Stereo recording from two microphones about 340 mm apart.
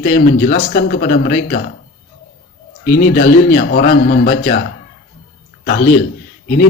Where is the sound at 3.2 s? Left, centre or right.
Left.